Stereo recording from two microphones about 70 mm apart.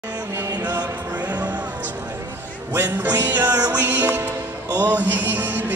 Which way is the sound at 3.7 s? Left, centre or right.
Right.